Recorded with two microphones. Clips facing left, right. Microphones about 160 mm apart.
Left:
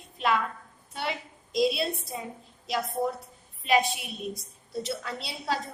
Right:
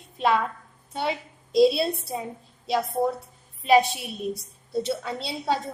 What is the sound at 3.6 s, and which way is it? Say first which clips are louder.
A woman's voice: right 6 dB; 35° right (ahead or behind).